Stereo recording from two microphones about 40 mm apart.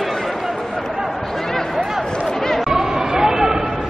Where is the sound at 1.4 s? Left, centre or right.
Centre.